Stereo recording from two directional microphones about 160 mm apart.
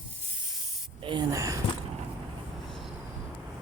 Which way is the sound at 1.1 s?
25° right (ahead or behind).